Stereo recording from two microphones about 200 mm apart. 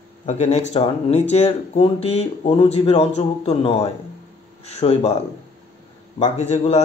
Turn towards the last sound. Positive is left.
turn(degrees=35)  # may be behind; listen again after turning